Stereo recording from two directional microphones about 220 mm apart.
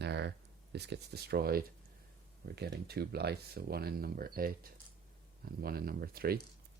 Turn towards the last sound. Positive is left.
turn(degrees=-45)  # may be behind; listen again after turning